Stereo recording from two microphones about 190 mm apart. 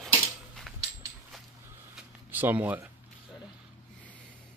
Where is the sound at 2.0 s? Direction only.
10° right (ahead or behind).